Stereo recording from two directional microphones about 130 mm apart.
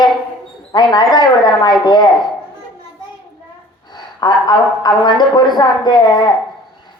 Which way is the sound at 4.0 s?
35° left (ahead or behind).